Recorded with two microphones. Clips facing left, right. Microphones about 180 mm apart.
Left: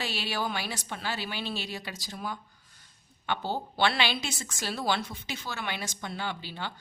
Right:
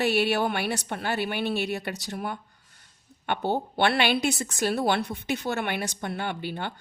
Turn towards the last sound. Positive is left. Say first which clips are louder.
# right 5 dB
turn(degrees=-55)  # may be behind; listen again after turning